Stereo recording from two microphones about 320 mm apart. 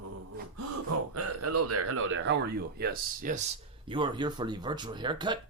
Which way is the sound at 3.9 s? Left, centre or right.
Centre.